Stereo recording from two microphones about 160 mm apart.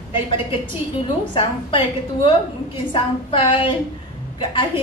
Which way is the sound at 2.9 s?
35° left (ahead or behind).